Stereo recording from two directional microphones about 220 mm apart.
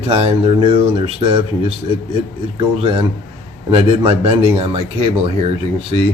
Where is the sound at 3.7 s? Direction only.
25° right (ahead or behind).